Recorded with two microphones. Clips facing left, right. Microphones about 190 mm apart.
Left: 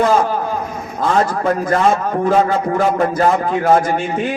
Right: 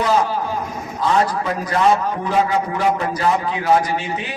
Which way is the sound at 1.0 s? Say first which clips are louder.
Left 3 dB; 50° left (ahead or behind).